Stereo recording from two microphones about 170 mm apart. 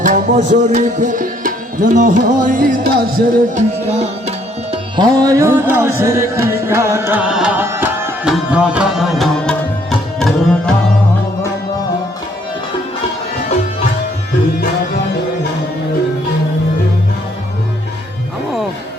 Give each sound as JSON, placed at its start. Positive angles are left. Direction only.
{"t": 0.0, "sound": "music", "side_deg": -50}
{"t": 3.8, "sound": "music", "side_deg": -40}
{"t": 5.0, "sound": "music", "side_deg": -20}
{"t": 8.3, "sound": "tabla", "side_deg": -5}